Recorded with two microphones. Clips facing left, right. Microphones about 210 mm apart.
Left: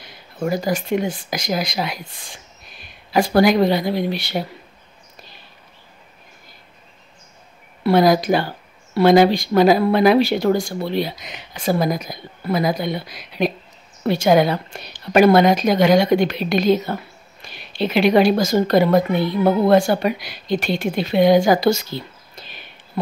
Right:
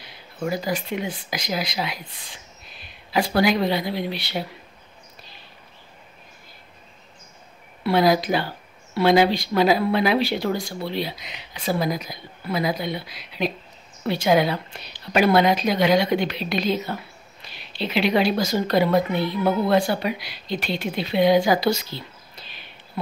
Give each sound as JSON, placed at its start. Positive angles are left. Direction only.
{"t": 0.4, "sound": "a woman's voice", "side_deg": 45}
{"t": 7.8, "sound": "a woman's voice", "side_deg": 45}